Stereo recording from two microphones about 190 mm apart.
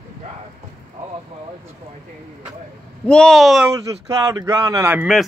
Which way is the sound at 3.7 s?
20° right (ahead or behind).